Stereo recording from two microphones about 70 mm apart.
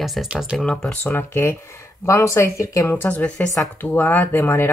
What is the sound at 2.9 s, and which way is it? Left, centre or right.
Speech, left.